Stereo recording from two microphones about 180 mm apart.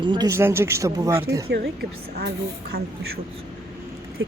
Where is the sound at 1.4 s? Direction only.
65° right (ahead or behind).